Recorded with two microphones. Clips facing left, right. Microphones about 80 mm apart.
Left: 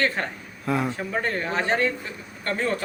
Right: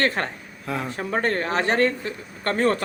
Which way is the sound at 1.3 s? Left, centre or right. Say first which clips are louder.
Right 2 dB; right.